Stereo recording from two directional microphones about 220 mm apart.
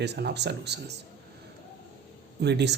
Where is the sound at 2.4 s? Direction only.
50° right (ahead or behind).